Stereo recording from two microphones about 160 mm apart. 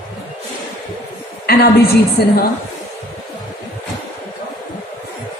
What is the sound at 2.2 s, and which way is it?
Speech, 80° left.